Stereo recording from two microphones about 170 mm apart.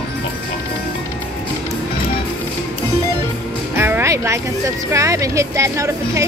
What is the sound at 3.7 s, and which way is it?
Speech, 15° right (ahead or behind).